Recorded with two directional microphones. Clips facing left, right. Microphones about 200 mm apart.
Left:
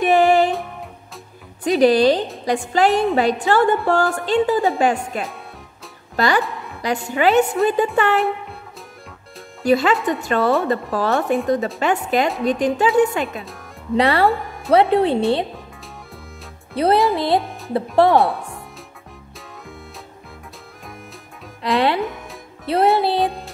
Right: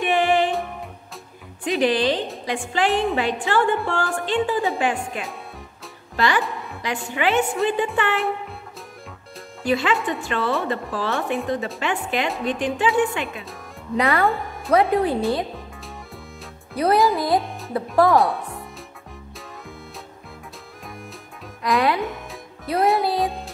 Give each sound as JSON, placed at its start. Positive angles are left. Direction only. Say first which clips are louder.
{"t": 0.0, "sound": "music", "louder": "left 5 dB", "side_deg": 40}
{"t": 1.6, "sound": "a woman's voice", "louder": "left 6 dB", "side_deg": 40}
{"t": 9.7, "sound": "a woman's voice", "louder": "left 5 dB", "side_deg": 40}
{"t": 16.7, "sound": "speech", "louder": "left 2 dB", "side_deg": 30}
{"t": 17.4, "sound": "music", "louder": "left 2 dB", "side_deg": 0}
{"t": 18.1, "sound": "speech", "louder": "left 2 dB", "side_deg": 0}
{"t": 21.6, "sound": "speech", "louder": "left 2 dB", "side_deg": 30}
{"t": 22.0, "sound": "music", "louder": "left 2 dB", "side_deg": 0}
{"t": 22.7, "sound": "speech", "louder": "left 4 dB", "side_deg": 30}
{"t": 23.1, "sound": "music", "louder": "left 3 dB", "side_deg": 0}